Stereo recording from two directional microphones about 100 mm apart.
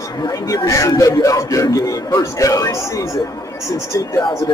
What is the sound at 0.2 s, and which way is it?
Speech, 35° left (ahead or behind).